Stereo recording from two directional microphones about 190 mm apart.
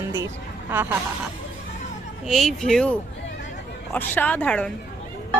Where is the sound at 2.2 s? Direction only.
Centre (ahead or behind).